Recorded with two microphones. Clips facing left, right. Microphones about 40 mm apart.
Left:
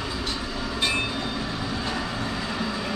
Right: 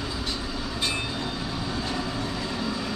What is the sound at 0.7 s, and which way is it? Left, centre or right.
Train, left.